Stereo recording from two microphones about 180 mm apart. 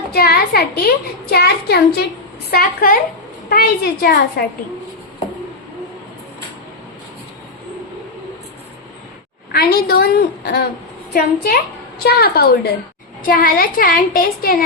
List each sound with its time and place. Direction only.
0.1 s a child's voice: 55° left (ahead or behind)
9.5 s a woman's voice: 60° left (ahead or behind)